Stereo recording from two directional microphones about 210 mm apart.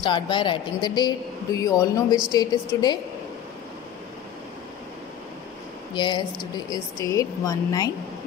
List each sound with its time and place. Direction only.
0.0 s speech: 20° left (ahead or behind)
5.9 s speech: 20° left (ahead or behind)